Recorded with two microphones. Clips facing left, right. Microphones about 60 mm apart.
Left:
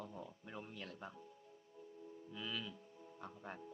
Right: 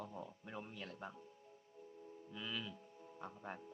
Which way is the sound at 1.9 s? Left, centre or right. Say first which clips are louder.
Left 1 dB; centre.